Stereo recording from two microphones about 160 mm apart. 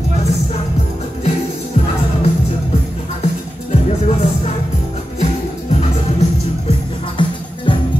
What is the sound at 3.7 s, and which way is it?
Music, 45° left (ahead or behind).